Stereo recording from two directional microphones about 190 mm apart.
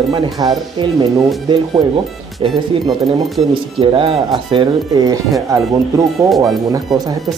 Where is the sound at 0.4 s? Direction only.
20° right (ahead or behind).